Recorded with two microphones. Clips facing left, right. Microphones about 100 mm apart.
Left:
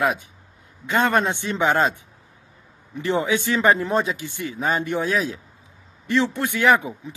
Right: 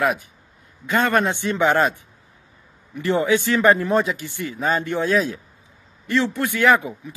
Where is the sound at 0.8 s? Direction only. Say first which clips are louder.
Right 1 dB; 20° left (ahead or behind).